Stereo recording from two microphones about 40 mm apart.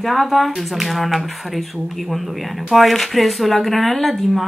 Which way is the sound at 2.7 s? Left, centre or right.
Centre.